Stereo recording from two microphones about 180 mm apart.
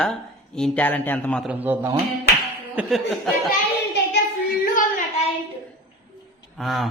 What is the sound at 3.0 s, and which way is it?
Speech, centre (ahead or behind).